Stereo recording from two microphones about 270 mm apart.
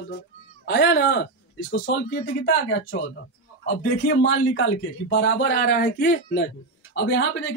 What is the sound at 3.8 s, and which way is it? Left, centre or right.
Speech, left.